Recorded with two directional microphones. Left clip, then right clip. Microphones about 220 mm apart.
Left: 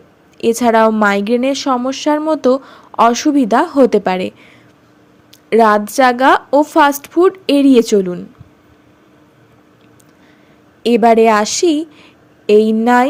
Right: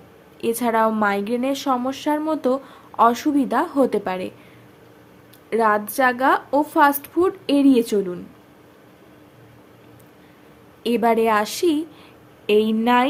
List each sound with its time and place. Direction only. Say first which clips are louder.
0.3 s a woman's voice: left 9 dB; 25° left (ahead or behind)
5.5 s a woman's voice: left 8 dB; 30° left (ahead or behind)
10.8 s a woman's voice: left 9 dB; 25° left (ahead or behind)